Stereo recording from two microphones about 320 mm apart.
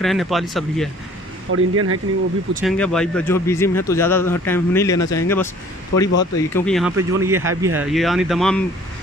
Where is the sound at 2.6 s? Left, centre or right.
Centre.